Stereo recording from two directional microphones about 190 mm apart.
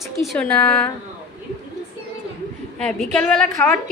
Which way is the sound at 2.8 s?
5° left (ahead or behind).